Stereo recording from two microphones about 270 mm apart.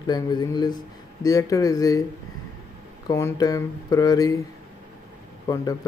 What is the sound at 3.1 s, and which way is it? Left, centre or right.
Speech, centre.